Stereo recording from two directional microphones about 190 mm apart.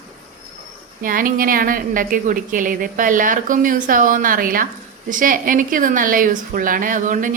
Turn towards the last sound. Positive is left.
turn(degrees=-45)  # may be behind; listen again after turning